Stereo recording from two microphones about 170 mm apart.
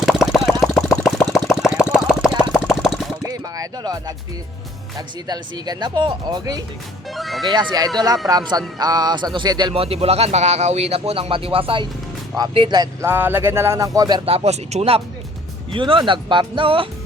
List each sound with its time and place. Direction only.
0.0 s engine: centre (ahead or behind)
2.6 s a sound: centre (ahead or behind)
3.2 s music: 20° right (ahead or behind)
4.9 s speech: 25° right (ahead or behind)
7.2 s speech: centre (ahead or behind)
7.5 s a man's voice: 25° right (ahead or behind)
14.3 s a man's voice: 35° right (ahead or behind)